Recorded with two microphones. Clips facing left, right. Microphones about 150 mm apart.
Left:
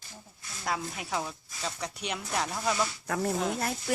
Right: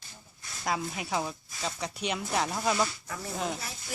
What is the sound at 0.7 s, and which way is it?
Speech, 10° right (ahead or behind).